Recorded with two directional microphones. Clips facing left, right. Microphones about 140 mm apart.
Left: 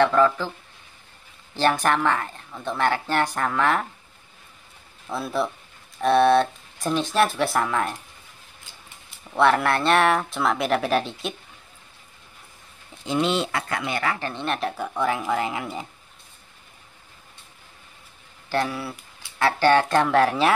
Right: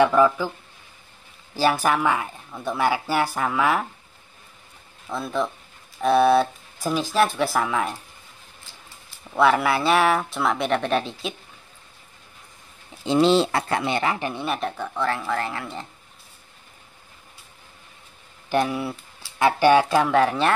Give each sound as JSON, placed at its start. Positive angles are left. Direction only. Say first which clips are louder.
{"t": 0.0, "sound": "speech", "louder": "right 1 dB", "side_deg": -10}
{"t": 1.5, "sound": "speech", "louder": "even", "side_deg": -5}
{"t": 5.0, "sound": "speech", "louder": "even", "side_deg": 5}
{"t": 9.3, "sound": "speech", "louder": "even", "side_deg": 0}
{"t": 13.0, "sound": "speech", "louder": "right 5 dB", "side_deg": -30}
{"t": 14.3, "sound": "speech", "louder": "even", "side_deg": -5}
{"t": 15.0, "sound": "speech", "louder": "left 2 dB", "side_deg": 15}
{"t": 18.5, "sound": "speech", "louder": "right 3 dB", "side_deg": -20}